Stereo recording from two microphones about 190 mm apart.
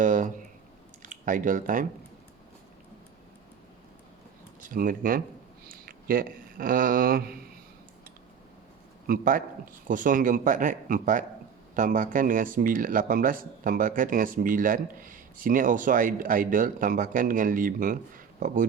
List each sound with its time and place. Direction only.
0.0 s a sound: 40° right (ahead or behind)
1.0 s speech: 45° right (ahead or behind)
4.7 s speech: 45° right (ahead or behind)
9.0 s speech: 50° right (ahead or behind)